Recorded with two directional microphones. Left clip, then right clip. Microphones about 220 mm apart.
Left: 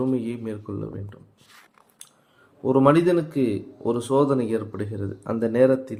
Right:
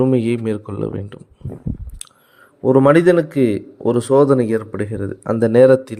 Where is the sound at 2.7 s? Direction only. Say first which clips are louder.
Right 7 dB; 35° right (ahead or behind).